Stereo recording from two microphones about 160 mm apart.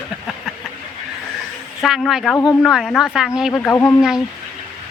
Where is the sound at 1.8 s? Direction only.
Centre (ahead or behind).